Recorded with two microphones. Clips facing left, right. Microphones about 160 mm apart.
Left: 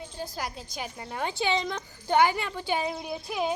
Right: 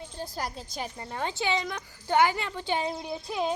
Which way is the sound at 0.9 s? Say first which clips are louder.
Left 2 dB; 15° left (ahead or behind).